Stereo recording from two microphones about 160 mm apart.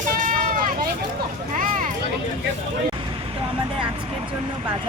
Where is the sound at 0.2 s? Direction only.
55° right (ahead or behind).